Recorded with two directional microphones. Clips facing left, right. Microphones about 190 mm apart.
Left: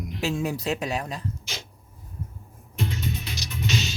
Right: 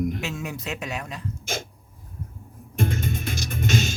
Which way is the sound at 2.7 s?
50° right (ahead or behind).